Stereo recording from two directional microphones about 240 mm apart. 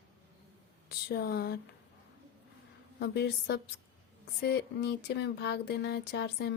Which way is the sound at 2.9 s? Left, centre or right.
Left.